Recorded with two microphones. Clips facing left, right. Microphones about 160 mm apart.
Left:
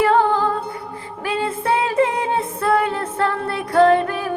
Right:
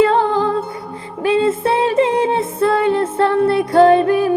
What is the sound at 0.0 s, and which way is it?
Music, 25° right (ahead or behind).